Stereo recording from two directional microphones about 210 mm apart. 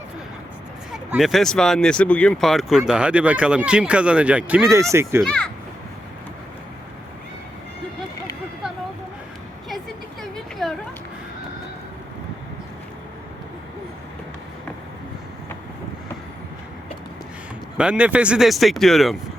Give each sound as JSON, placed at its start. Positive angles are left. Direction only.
{"t": 1.1, "sound": "speech", "side_deg": 0}
{"t": 5.2, "sound": "speech", "side_deg": 5}
{"t": 10.3, "sound": "a sound", "side_deg": 0}
{"t": 17.7, "sound": "speech", "side_deg": -5}